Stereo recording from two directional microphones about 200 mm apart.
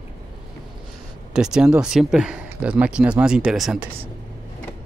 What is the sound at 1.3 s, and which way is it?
Speech, 5° right (ahead or behind).